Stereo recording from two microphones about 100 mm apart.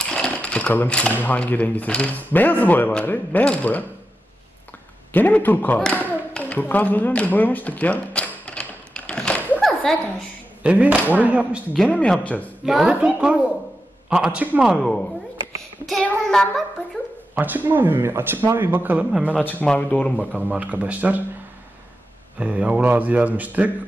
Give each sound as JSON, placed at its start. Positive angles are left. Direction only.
{"t": 0.0, "sound": "ratchet", "side_deg": 10}
{"t": 1.2, "sound": "speech", "side_deg": 15}
{"t": 5.1, "sound": "speech", "side_deg": 20}
{"t": 5.8, "sound": "a sound", "side_deg": 15}
{"t": 10.6, "sound": "speech", "side_deg": -10}
{"t": 11.9, "sound": "speech", "side_deg": 15}
{"t": 12.6, "sound": "a man's voice", "side_deg": -5}
{"t": 14.8, "sound": "child singing", "side_deg": 5}
{"t": 17.4, "sound": "speech", "side_deg": -20}
{"t": 19.6, "sound": "speech", "side_deg": 10}
{"t": 20.5, "sound": "speech", "side_deg": -15}
{"t": 22.4, "sound": "speech", "side_deg": -15}